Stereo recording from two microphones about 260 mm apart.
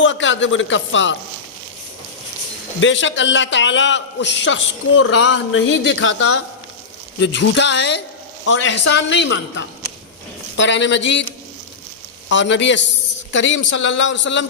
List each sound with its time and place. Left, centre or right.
0.0 s a man's voice: left
2.8 s a man's voice: left
12.3 s a man's voice: left